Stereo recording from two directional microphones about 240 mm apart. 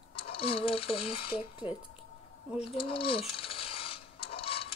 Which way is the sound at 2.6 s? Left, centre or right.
Left.